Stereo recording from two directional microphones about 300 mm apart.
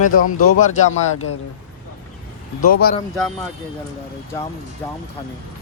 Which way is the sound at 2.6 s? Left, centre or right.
Left.